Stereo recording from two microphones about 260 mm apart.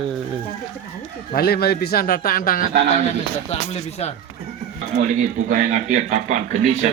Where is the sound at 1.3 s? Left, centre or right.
Left.